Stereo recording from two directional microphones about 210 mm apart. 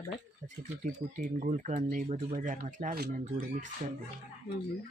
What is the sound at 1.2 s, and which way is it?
Speech, 35° right (ahead or behind).